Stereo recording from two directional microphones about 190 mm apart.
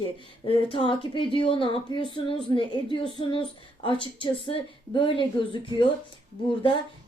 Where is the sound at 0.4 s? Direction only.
30° left (ahead or behind).